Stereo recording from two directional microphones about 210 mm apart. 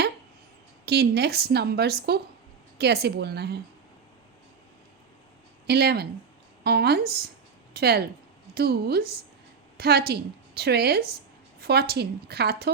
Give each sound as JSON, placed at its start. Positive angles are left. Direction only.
{"t": 0.9, "sound": "a woman's voice", "side_deg": -50}
{"t": 5.6, "sound": "a woman's voice", "side_deg": -50}